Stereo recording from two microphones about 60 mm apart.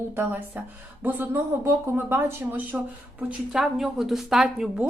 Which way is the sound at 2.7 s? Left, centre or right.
Centre.